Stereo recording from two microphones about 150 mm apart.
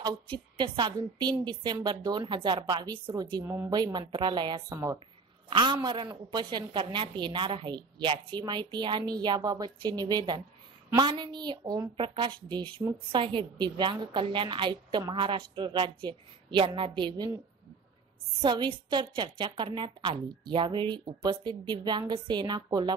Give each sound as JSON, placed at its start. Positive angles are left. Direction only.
{"t": 0.0, "sound": "a woman's voice", "side_deg": -30}
{"t": 3.4, "sound": "a woman's voice", "side_deg": -15}
{"t": 3.7, "sound": "a woman's voice", "side_deg": -30}
{"t": 5.5, "sound": "a woman's voice", "side_deg": -30}
{"t": 18.4, "sound": "a woman's voice", "side_deg": -30}